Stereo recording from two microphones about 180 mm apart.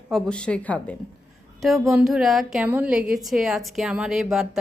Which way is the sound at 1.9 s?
5° right (ahead or behind).